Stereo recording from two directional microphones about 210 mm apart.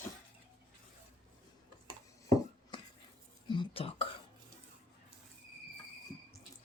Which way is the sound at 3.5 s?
25° left (ahead or behind).